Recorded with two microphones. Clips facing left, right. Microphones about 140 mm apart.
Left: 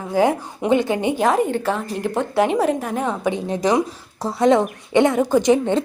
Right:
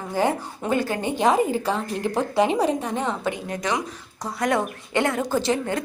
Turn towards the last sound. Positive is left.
turn(degrees=20)  # may be behind; listen again after turning